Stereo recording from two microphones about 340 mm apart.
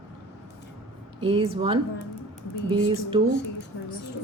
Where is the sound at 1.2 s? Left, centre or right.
Centre.